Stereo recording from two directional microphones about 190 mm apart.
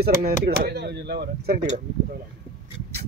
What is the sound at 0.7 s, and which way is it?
Speech, 60° right (ahead or behind).